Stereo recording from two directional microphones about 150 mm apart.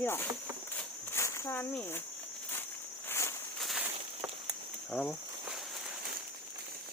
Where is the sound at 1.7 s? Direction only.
15° left (ahead or behind).